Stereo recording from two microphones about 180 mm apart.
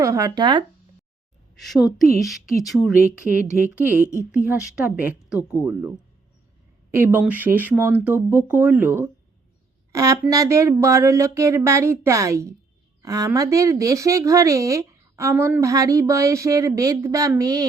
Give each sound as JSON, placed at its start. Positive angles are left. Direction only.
{"t": 0.0, "sound": "speech", "side_deg": -20}
{"t": 1.5, "sound": "a woman's voice", "side_deg": 0}
{"t": 6.9, "sound": "speech", "side_deg": -10}